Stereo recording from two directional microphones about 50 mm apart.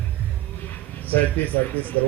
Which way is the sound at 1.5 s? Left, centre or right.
Left.